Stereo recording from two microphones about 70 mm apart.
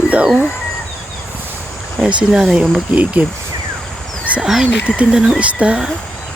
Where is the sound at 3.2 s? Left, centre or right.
Right.